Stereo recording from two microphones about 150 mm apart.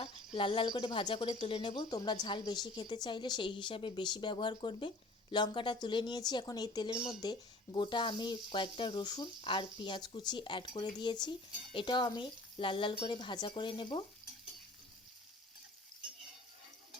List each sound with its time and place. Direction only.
0.3 s speech: 35° left (ahead or behind)
0.7 s speech: 25° left (ahead or behind)
0.9 s speech: 35° left (ahead or behind)